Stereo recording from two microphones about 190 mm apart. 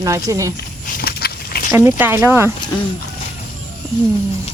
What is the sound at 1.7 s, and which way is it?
Speech, 15° right (ahead or behind).